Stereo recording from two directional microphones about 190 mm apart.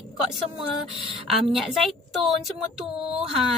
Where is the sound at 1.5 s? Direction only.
Centre (ahead or behind).